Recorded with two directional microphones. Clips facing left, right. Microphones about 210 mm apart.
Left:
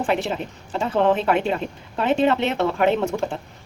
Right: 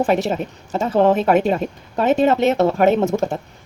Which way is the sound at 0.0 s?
40° right (ahead or behind).